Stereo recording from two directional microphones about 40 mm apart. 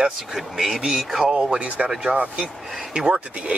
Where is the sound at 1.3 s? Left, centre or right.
Right.